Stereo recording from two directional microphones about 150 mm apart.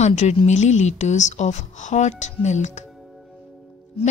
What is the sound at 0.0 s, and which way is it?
Speech, 50° left (ahead or behind).